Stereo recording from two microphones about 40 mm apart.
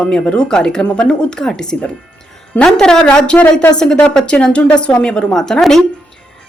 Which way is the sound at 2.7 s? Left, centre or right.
Centre.